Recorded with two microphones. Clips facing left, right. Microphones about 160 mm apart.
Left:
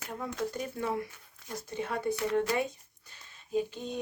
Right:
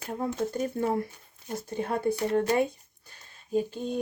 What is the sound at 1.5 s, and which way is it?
Speech, 30° right (ahead or behind).